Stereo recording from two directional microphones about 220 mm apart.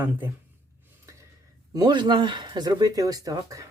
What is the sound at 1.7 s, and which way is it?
Speech, 20° right (ahead or behind).